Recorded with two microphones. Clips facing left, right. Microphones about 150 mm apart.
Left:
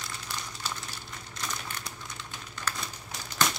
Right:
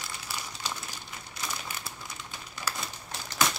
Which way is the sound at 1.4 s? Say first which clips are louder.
Even; 5° right (ahead or behind).